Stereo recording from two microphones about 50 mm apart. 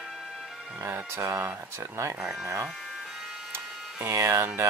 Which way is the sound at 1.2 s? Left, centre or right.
Right.